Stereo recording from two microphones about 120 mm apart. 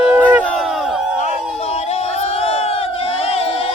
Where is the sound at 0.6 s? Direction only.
Centre (ahead or behind).